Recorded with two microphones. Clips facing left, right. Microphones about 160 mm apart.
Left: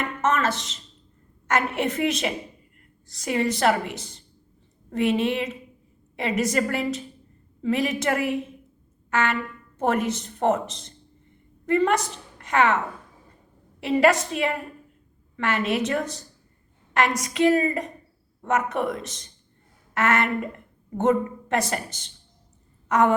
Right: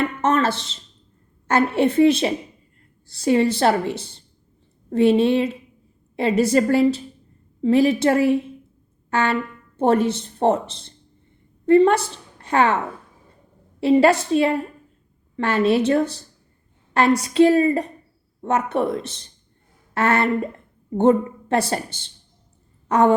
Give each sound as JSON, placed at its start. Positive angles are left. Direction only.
{"t": 0.2, "sound": "a woman's voice", "side_deg": -30}
{"t": 13.8, "sound": "a woman's voice", "side_deg": -30}